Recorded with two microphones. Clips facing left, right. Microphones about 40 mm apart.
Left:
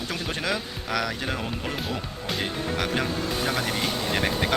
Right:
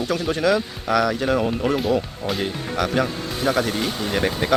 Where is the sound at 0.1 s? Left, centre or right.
Centre.